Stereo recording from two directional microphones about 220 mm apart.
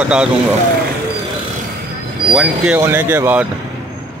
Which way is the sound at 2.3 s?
5° right (ahead or behind).